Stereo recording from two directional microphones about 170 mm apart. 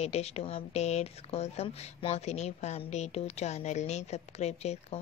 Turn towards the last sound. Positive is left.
turn(degrees=40)  # may be behind; listen again after turning